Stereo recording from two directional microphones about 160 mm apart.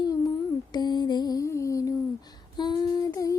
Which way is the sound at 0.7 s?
25° left (ahead or behind).